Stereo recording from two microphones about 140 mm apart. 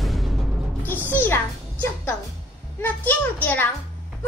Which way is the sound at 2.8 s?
15° left (ahead or behind).